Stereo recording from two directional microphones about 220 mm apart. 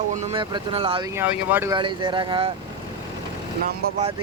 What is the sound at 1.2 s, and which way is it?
Speech, 10° right (ahead or behind).